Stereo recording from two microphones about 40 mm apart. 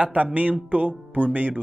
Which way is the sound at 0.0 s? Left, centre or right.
Right.